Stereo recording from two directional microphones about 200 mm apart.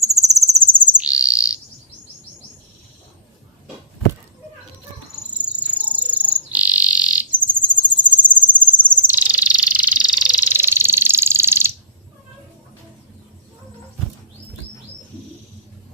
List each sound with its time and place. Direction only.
0.0 s bird: 15° right (ahead or behind)
5.6 s bird: 5° right (ahead or behind)
6.5 s frog: 5° right (ahead or behind)
7.6 s cricket: 10° right (ahead or behind)
9.0 s frog: 10° right (ahead or behind)